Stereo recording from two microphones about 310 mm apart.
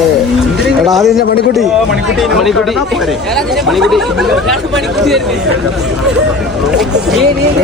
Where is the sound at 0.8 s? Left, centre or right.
Centre.